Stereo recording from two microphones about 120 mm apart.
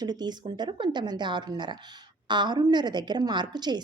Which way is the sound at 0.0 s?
35° right (ahead or behind).